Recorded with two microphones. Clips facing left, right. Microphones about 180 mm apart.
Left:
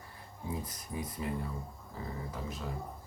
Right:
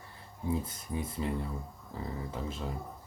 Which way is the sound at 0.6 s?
25° right (ahead or behind).